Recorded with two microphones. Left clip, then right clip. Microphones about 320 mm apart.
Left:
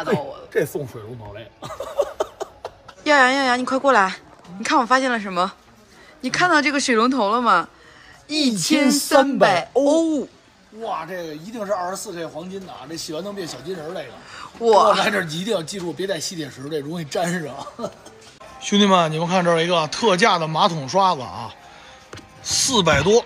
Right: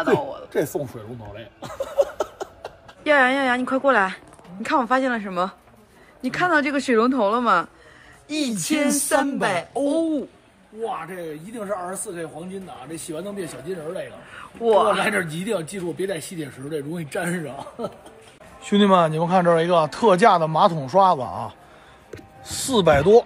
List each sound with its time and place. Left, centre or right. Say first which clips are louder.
0.0 s speech: right 2 dB; centre
11.5 s speech: left 5 dB; centre
18.7 s speech: left 1 dB; centre